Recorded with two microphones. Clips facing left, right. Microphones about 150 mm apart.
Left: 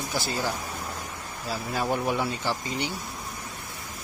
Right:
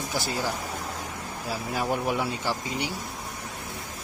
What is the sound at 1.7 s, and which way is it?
Speech, 5° right (ahead or behind).